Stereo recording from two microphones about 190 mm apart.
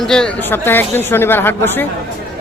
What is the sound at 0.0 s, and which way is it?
Speech, 5° left (ahead or behind).